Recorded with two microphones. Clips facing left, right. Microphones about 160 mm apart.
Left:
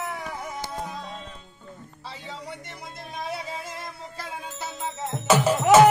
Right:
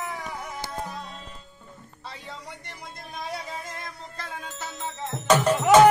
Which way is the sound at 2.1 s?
5° left (ahead or behind).